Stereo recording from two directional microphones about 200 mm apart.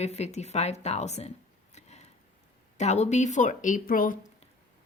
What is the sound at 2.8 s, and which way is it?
Speech, 35° left (ahead or behind).